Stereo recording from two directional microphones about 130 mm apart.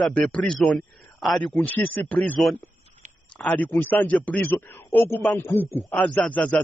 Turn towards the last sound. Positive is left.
turn(degrees=10)  # may be behind; listen again after turning